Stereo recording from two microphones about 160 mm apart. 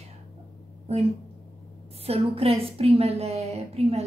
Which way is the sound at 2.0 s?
40° right (ahead or behind).